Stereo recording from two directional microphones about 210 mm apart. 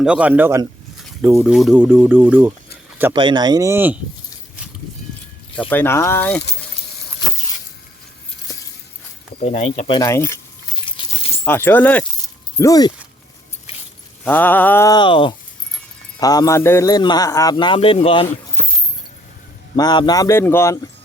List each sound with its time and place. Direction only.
0.0 s speech: 5° right (ahead or behind)
3.1 s speech: 20° right (ahead or behind)
5.5 s speech: 10° left (ahead or behind)
9.4 s a man's voice: 30° left (ahead or behind)
10.1 s speech: 15° left (ahead or behind)
11.4 s speech: 10° left (ahead or behind)
13.7 s keys jangling: 25° left (ahead or behind)
14.3 s a man's voice: 10° left (ahead or behind); by 18.3 s 25° left (ahead or behind)
19.7 s speech: 20° left (ahead or behind)